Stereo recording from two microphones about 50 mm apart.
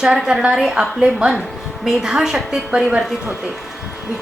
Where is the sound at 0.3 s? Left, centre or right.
Centre.